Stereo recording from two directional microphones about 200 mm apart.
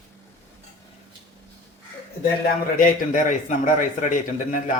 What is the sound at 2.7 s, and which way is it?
A man's voice, 40° left (ahead or behind).